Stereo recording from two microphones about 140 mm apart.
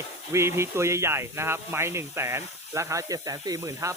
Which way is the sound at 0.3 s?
20° right (ahead or behind).